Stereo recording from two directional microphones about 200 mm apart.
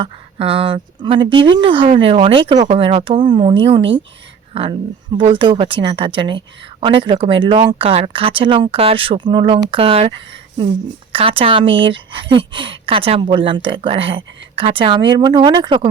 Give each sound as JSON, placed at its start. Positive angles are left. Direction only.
{"t": 0.0, "sound": "speech", "side_deg": -30}